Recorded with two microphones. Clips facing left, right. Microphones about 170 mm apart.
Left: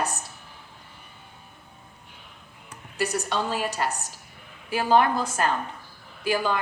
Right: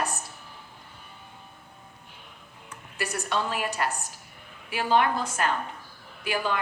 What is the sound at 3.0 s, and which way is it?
Speech, 25° left (ahead or behind).